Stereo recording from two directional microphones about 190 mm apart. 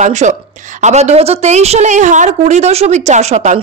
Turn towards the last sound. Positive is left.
turn(degrees=-35)  # may be behind; listen again after turning